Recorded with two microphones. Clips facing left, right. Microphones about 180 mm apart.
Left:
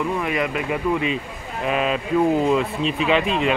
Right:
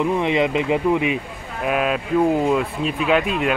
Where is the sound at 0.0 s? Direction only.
20° right (ahead or behind).